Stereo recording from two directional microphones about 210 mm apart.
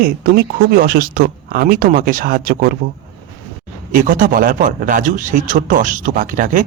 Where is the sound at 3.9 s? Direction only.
40° right (ahead or behind).